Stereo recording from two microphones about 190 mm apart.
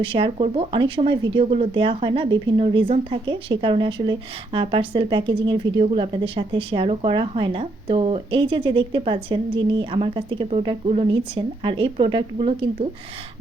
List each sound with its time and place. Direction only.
0.0 s speech: 30° right (ahead or behind)